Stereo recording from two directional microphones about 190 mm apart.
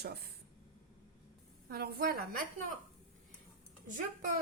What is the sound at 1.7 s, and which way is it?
A woman's voice, 55° right (ahead or behind).